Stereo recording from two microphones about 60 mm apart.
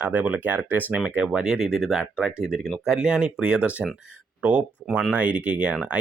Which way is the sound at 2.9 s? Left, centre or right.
Centre.